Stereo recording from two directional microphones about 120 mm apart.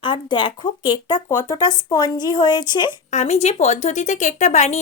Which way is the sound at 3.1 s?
65° left (ahead or behind).